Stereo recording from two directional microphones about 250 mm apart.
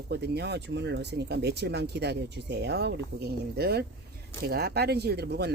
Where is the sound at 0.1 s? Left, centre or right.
Right.